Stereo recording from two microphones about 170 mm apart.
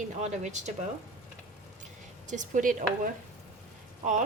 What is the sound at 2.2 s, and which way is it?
Speech, 45° right (ahead or behind).